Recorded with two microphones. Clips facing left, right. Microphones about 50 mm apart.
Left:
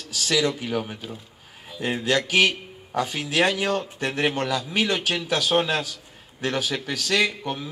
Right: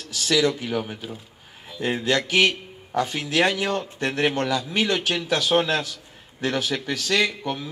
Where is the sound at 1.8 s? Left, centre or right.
Centre.